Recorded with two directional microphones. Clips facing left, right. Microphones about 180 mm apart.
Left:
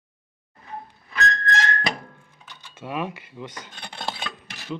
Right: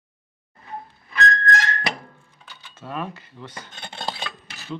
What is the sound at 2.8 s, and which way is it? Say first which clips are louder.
Speech: left 2 dB; 15° left (ahead or behind).